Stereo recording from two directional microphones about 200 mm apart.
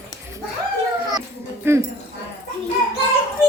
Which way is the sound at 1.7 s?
10° right (ahead or behind).